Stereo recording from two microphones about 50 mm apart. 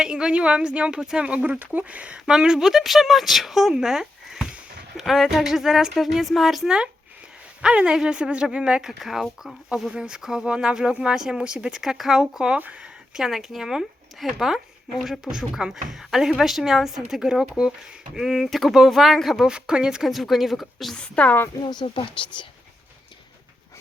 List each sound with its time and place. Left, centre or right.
0.0 s speech: centre
1.5 s speech: right; by 6.7 s centre
6.7 s speech: centre
8.8 s speech: centre
11.8 s speech: centre
12.5 s speech: right
12.8 s a sound: centre
13.3 s speech: centre
19.5 s speech: centre
20.1 s speech: centre
20.9 s a woman's voice: left